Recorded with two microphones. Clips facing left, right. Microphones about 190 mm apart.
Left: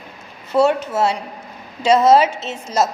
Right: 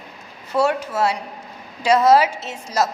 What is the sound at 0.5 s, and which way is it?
A woman's voice, 25° left (ahead or behind).